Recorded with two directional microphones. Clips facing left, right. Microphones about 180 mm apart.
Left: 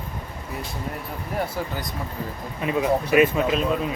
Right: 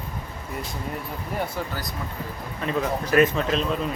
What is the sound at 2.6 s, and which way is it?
Speech, 10° left (ahead or behind).